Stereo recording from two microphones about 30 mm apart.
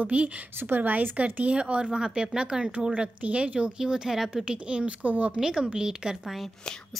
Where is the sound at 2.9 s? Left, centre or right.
Right.